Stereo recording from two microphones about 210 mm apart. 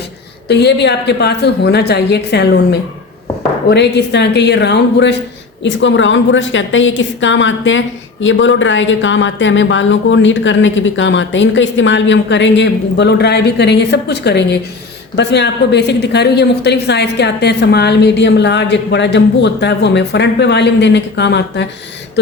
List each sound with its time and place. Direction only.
0.4 s a woman's voice: 55° left (ahead or behind)
3.7 s a woman's voice: 55° left (ahead or behind)